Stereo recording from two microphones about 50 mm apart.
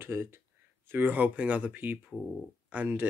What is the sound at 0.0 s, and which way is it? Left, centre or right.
Speech, right.